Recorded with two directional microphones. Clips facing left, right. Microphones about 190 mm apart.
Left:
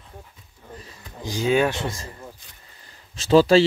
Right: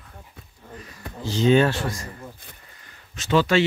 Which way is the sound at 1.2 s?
10° left (ahead or behind).